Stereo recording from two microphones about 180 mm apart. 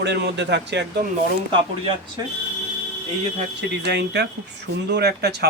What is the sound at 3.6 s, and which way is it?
Speech, 65° right (ahead or behind).